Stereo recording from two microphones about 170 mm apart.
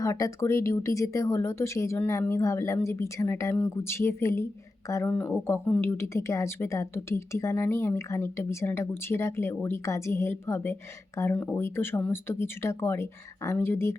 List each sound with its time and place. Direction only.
0.0 s speech: 20° left (ahead or behind)